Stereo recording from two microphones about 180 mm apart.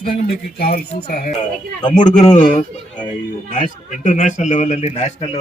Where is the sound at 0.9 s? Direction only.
55° left (ahead or behind).